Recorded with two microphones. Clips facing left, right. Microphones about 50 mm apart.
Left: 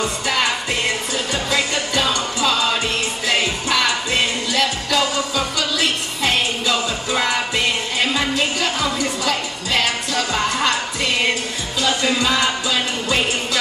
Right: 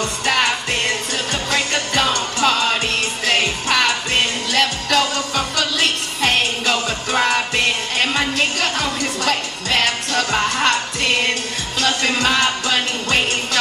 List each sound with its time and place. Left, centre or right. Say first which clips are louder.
1.5 s music: right 1 dB; right
4.5 s music: right 1 dB; right
7.2 s music: right 3 dB; right
8.4 s music: right 1 dB; right
11.8 s music: even; right
12.3 s music: right 1 dB; right